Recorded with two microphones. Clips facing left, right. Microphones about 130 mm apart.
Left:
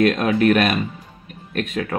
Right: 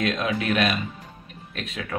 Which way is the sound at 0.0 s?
50° left (ahead or behind).